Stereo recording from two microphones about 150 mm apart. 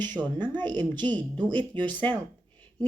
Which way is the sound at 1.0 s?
10° left (ahead or behind).